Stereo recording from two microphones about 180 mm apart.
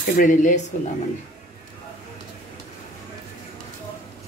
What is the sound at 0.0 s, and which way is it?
Speech, 45° left (ahead or behind).